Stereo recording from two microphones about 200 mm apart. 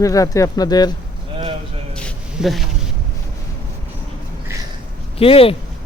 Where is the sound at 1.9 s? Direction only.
Centre (ahead or behind).